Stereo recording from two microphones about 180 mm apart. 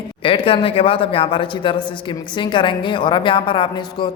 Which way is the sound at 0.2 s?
30° left (ahead or behind).